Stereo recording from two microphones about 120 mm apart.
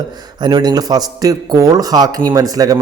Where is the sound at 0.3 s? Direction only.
40° right (ahead or behind).